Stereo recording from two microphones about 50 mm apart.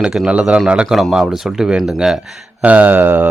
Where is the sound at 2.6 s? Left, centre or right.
Right.